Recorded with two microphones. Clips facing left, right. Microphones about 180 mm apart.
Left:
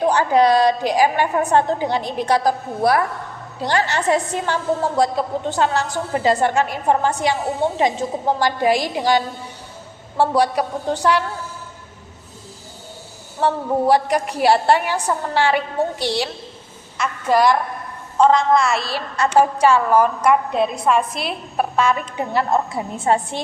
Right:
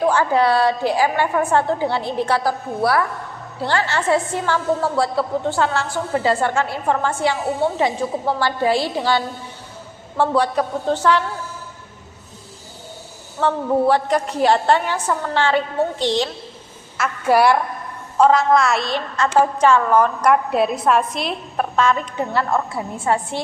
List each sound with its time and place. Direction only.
0.0 s a woman's voice: 20° left (ahead or behind)
13.4 s a woman's voice: 10° left (ahead or behind)
17.0 s a woman's voice: 10° right (ahead or behind); by 23.4 s 20° left (ahead or behind)